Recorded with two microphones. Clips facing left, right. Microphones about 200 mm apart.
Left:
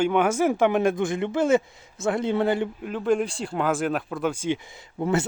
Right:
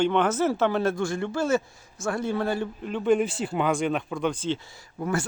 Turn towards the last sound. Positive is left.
turn(degrees=25)  # may be behind; listen again after turning